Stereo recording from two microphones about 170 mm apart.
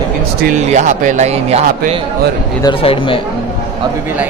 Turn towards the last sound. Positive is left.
turn(degrees=30)  # may be behind; listen again after turning